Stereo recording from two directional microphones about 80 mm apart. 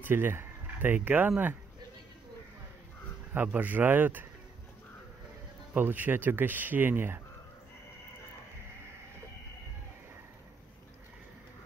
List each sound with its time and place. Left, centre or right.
0.0 s speech: right
3.3 s speech: right
5.8 s speech: right